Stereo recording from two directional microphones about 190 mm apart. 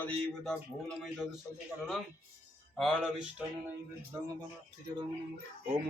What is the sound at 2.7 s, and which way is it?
Speech, centre (ahead or behind).